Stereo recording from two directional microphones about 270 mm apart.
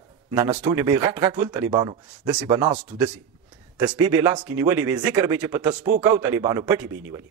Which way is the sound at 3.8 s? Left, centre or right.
Centre.